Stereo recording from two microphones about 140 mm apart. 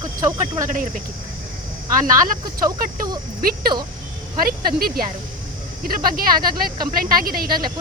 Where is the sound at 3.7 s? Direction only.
35° right (ahead or behind).